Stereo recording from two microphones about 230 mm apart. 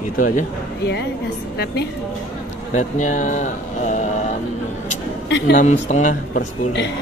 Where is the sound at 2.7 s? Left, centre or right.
Left.